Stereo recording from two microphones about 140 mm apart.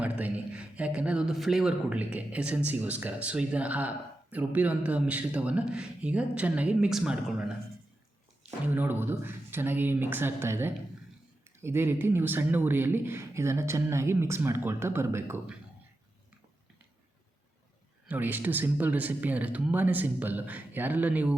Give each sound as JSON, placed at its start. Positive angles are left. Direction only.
{"t": 0.0, "sound": "a sound", "side_deg": -10}
{"t": 2.1, "sound": "speech", "side_deg": -10}
{"t": 18.1, "sound": "speech", "side_deg": -15}